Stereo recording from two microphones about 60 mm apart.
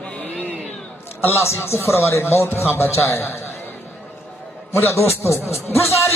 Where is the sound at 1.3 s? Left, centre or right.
Left.